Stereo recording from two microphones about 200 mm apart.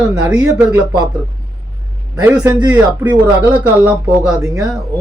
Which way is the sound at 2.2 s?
5° right (ahead or behind).